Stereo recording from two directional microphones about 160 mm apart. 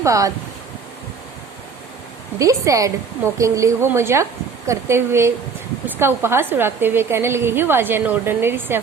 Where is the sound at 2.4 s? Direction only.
20° right (ahead or behind).